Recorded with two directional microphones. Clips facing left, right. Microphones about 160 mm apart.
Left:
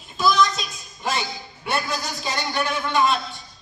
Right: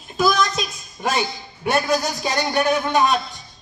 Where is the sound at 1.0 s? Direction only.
55° right (ahead or behind).